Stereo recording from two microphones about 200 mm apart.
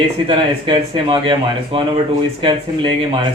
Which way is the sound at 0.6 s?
25° right (ahead or behind).